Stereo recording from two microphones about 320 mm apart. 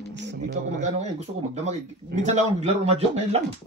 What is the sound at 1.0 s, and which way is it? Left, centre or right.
A man's voice, right.